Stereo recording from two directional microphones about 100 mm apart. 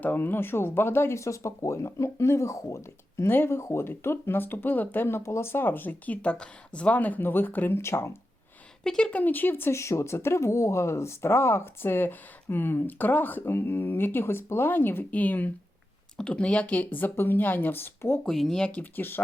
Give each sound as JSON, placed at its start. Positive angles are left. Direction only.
{"t": 0.0, "sound": "speech", "side_deg": 20}
{"t": 8.8, "sound": "speech", "side_deg": 5}
{"t": 18.3, "sound": "speech", "side_deg": 5}